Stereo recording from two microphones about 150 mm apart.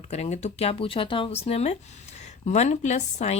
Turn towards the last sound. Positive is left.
turn(degrees=50)  # may be behind; listen again after turning